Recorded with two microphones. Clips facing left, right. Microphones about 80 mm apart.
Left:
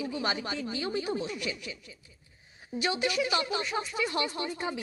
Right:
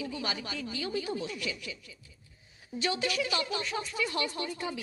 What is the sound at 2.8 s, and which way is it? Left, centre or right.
Speech, left.